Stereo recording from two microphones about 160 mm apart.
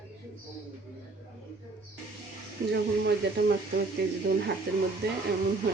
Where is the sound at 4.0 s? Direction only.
90° right.